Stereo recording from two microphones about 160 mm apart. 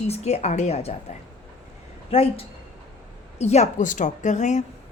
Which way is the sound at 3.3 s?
45° left (ahead or behind).